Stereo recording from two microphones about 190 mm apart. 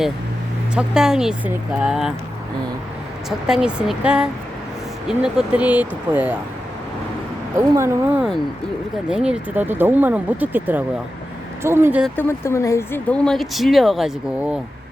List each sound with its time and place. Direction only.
0.8 s speech: 5° right (ahead or behind)
3.2 s speech: 5° right (ahead or behind)
7.7 s speech: 15° right (ahead or behind)
12.1 s speech: 15° left (ahead or behind); by 14.6 s 5° right (ahead or behind)